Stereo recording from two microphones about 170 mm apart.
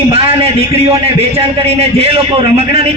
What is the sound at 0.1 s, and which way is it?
A man's voice, 35° right (ahead or behind).